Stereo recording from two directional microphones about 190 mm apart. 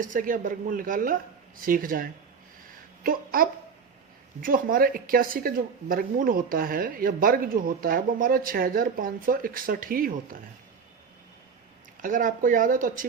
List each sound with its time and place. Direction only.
0.0 s speech: 45° right (ahead or behind)
12.0 s speech: 45° right (ahead or behind)